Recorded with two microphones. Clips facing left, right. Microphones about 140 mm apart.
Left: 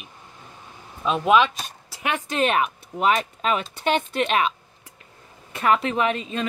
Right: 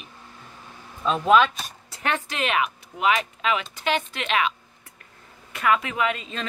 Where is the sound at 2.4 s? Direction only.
40° left (ahead or behind).